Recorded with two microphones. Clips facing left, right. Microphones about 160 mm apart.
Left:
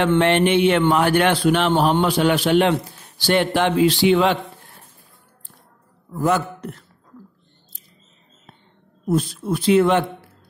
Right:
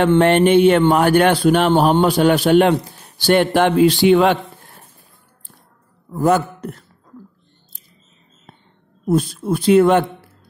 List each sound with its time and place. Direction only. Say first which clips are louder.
0.2 s a man's voice: right 4 dB; 45° right (ahead or behind)
6.1 s a man's voice: right 4 dB; 45° right (ahead or behind)
9.0 s a man's voice: right 3 dB; 40° right (ahead or behind)